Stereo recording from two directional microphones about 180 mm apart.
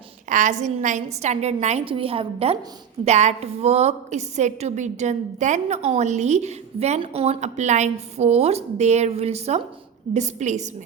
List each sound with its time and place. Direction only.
0.3 s a woman's voice: 45° right (ahead or behind)